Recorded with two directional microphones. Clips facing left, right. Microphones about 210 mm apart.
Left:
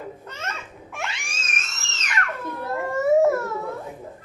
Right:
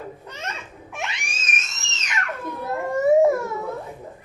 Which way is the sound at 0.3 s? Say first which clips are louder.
Even; 15° right (ahead or behind).